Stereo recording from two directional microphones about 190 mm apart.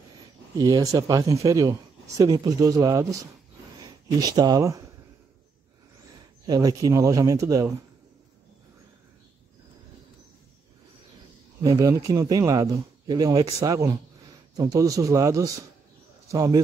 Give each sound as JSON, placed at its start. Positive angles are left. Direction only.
{"t": 0.6, "sound": "speech", "side_deg": -20}
{"t": 6.4, "sound": "speech", "side_deg": -20}
{"t": 11.6, "sound": "speech", "side_deg": -20}